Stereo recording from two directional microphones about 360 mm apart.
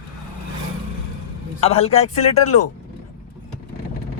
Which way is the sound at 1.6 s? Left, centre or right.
Centre.